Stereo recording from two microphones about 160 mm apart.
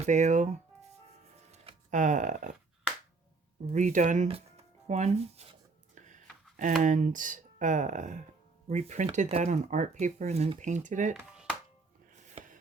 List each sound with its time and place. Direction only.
0.0 s speech: 50° right (ahead or behind)
1.5 s a sound: 40° right (ahead or behind)
3.7 s speech: 50° right (ahead or behind)
4.9 s a sound: 45° right (ahead or behind)
6.8 s speech: 55° right (ahead or behind)
12.4 s chopping: 40° right (ahead or behind)